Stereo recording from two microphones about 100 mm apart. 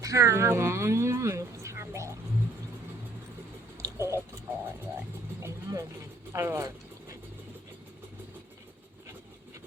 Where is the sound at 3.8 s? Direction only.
30° right (ahead or behind).